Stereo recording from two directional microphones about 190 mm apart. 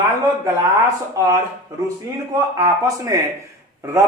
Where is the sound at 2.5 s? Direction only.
20° right (ahead or behind).